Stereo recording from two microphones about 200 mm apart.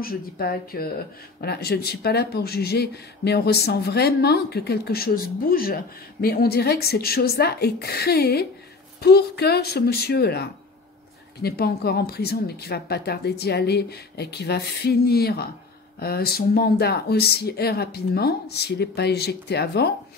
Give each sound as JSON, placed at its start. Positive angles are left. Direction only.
{"t": 0.0, "sound": "speech", "side_deg": 50}